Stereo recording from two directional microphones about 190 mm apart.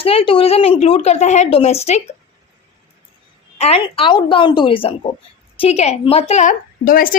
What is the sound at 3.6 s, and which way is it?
A woman's voice, 30° left (ahead or behind).